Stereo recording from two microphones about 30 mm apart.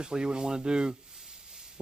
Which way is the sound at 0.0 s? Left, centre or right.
Right.